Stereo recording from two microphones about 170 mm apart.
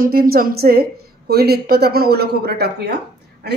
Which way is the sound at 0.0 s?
60° right (ahead or behind).